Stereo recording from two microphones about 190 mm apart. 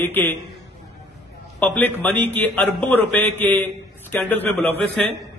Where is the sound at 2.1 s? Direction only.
65° right (ahead or behind).